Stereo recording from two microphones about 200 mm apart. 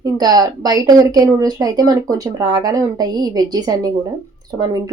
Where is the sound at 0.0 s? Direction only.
20° right (ahead or behind).